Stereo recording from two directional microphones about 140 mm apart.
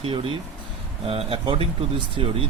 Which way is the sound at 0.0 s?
40° right (ahead or behind).